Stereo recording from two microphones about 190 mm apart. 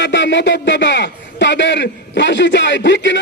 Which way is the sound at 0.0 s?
70° left (ahead or behind).